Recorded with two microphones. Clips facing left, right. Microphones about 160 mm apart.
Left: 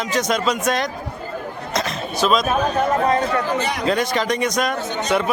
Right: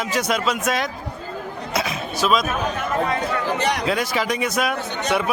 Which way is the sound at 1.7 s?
5° right (ahead or behind).